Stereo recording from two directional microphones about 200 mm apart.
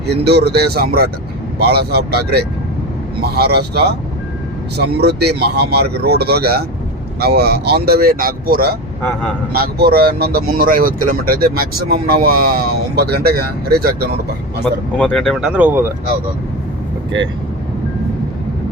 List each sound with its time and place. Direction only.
0.1 s speech: 55° right (ahead or behind)
14.9 s speech: 5° left (ahead or behind)
17.1 s speech: 65° right (ahead or behind)